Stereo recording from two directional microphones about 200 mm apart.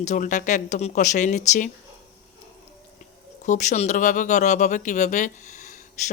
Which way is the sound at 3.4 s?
35° left (ahead or behind).